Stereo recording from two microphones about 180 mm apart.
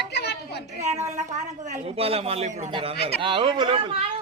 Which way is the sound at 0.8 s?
40° right (ahead or behind).